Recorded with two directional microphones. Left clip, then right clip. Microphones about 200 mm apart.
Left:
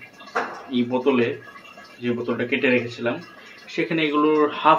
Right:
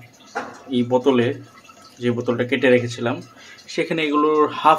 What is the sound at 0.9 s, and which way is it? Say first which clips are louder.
Speech: right 3 dB; 25° right (ahead or behind).